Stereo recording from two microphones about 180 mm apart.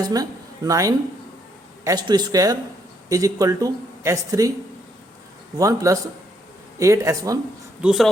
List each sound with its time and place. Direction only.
0.0 s speech: 20° right (ahead or behind)
5.5 s speech: 20° right (ahead or behind)
7.8 s speech: centre (ahead or behind)